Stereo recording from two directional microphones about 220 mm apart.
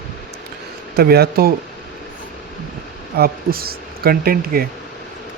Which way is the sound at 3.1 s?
45° right (ahead or behind).